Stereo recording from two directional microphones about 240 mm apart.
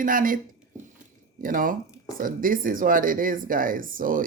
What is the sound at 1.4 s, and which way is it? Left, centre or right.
Speech, right.